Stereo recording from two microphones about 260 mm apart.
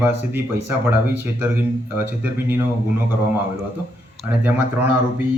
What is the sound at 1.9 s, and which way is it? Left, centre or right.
Speech, centre.